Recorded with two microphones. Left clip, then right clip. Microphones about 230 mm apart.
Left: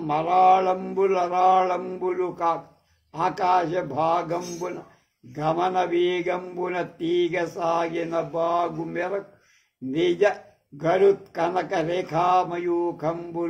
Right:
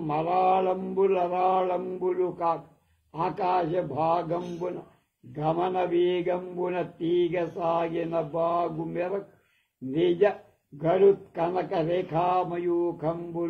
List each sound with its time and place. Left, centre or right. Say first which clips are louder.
0.0 s a man's voice: left 6 dB; left
7.5 s a man's voice: left 3 dB; left
12.2 s a man's voice: left 6 dB; left